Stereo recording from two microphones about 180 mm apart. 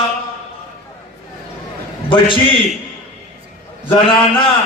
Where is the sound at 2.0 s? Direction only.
30° left (ahead or behind).